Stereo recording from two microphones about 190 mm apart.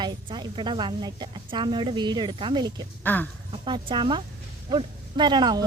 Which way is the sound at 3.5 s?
30° right (ahead or behind).